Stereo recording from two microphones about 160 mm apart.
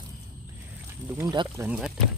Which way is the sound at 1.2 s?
20° right (ahead or behind).